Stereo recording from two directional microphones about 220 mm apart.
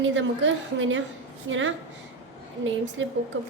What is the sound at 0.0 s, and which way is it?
A woman's voice, 55° right (ahead or behind).